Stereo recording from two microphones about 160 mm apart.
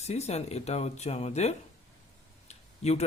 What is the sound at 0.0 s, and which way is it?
A man's voice, 45° left (ahead or behind).